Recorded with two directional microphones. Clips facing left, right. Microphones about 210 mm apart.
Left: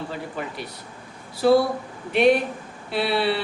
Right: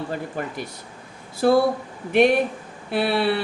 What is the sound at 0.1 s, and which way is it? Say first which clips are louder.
Speech: right 3 dB; 45° right (ahead or behind).